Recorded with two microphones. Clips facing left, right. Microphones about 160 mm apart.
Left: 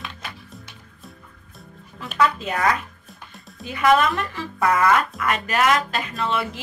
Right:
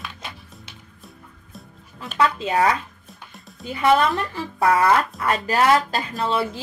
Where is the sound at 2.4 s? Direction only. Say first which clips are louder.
Right 5 dB; 30° right (ahead or behind).